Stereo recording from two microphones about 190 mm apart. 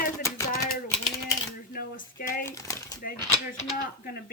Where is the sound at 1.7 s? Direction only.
50° left (ahead or behind).